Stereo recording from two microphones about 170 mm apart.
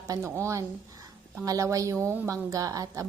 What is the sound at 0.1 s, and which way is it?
A woman's voice, 15° right (ahead or behind).